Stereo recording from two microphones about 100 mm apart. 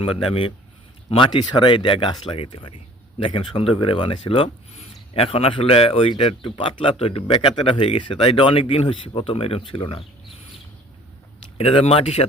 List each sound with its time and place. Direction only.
0.0 s speech: 65° left (ahead or behind)
7.3 s speech: 50° left (ahead or behind)
7.6 s speech: 65° left (ahead or behind)
11.5 s speech: 70° left (ahead or behind); by 12.2 s 90° left